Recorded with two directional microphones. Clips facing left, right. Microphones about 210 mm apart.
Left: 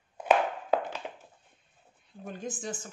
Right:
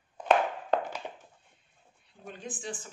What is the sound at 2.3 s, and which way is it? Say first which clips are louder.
Speech: left 3 dB; 45° left (ahead or behind).